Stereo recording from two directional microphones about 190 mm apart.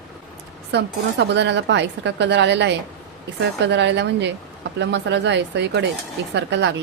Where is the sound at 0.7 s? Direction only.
65° right (ahead or behind).